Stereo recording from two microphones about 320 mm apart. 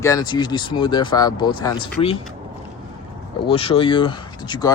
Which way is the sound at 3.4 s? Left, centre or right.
Centre.